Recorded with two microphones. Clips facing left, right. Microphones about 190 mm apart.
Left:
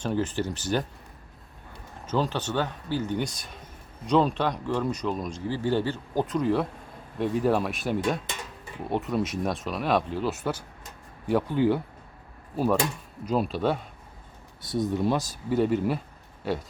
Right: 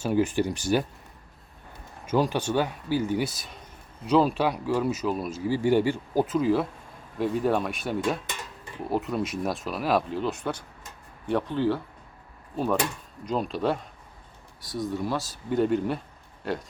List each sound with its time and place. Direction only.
0.0 s speech: 10° right (ahead or behind)
2.0 s speech: 10° right (ahead or behind)
14.8 s speech: 20° left (ahead or behind)
15.4 s speech: centre (ahead or behind)